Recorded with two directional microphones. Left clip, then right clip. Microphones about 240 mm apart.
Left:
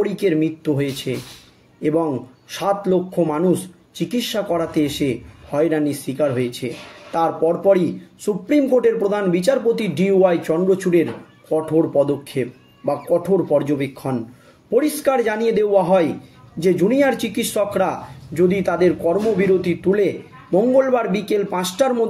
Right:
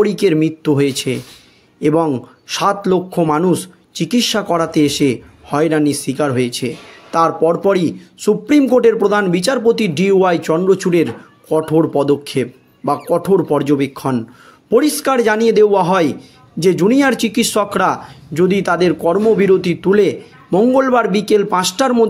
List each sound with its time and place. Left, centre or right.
0.0 s speech: right